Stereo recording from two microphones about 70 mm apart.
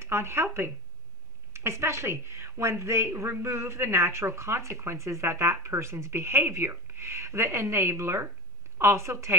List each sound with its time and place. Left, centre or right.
0.0 s a woman's voice: right